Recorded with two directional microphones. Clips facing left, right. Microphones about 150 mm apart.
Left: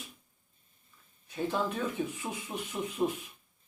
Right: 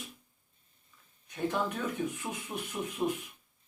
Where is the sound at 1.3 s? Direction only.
5° left (ahead or behind).